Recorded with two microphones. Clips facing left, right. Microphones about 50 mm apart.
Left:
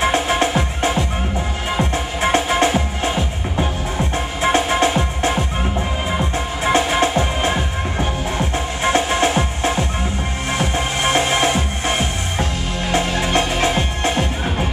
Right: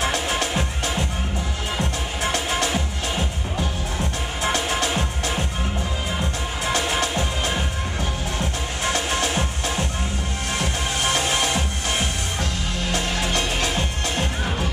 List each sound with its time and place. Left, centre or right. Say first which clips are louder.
0.0 s music: left 6 dB; left